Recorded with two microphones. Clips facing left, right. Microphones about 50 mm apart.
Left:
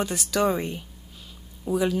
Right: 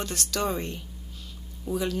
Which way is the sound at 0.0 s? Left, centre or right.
Centre.